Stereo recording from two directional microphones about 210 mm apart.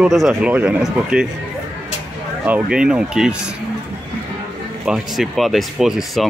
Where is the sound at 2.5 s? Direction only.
5° right (ahead or behind).